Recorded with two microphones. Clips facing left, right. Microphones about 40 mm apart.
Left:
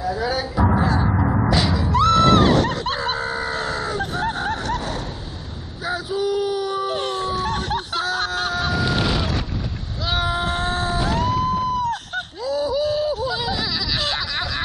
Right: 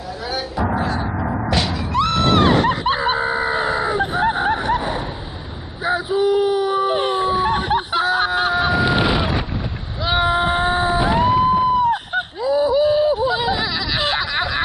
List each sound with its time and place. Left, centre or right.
0.7 s a sound: right
1.9 s screaming: right
5.9 s wail: right
10.0 s cat: right